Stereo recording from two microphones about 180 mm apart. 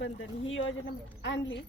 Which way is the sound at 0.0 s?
90° left.